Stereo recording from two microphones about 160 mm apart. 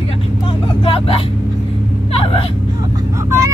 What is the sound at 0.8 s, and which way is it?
Speech, 35° left (ahead or behind).